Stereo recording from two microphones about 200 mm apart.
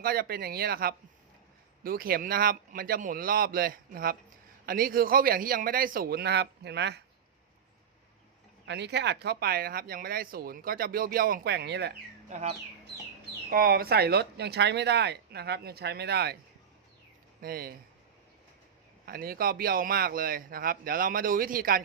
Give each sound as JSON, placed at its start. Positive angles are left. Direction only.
{"t": 0.0, "sound": "speech", "side_deg": -50}
{"t": 8.6, "sound": "speech", "side_deg": -60}
{"t": 12.3, "sound": "speech", "side_deg": -35}
{"t": 13.5, "sound": "speech", "side_deg": -50}
{"t": 17.4, "sound": "speech", "side_deg": -50}
{"t": 19.0, "sound": "speech", "side_deg": -50}